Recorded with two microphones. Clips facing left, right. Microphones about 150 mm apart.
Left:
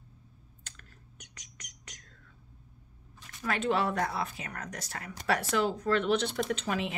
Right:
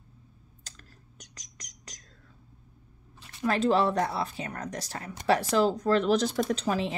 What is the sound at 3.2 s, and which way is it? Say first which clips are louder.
Speech: right 6 dB; 30° right (ahead or behind).